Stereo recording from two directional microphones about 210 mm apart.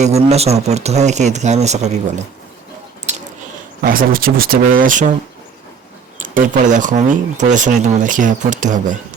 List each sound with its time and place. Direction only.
0.0 s speech: 30° right (ahead or behind)
3.8 s speech: 45° right (ahead or behind)
6.1 s speech: 35° right (ahead or behind)